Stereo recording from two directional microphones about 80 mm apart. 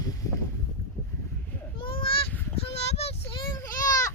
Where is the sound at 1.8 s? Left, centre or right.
Left.